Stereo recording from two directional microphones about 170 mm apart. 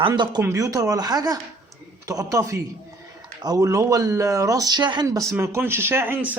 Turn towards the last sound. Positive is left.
turn(degrees=-15)  # may be behind; listen again after turning